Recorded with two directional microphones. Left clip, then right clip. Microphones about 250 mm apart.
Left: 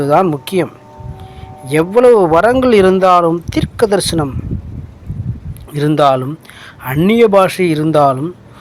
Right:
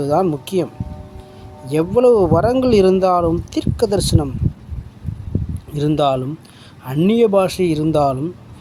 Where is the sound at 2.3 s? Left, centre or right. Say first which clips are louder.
Left 6 dB; centre.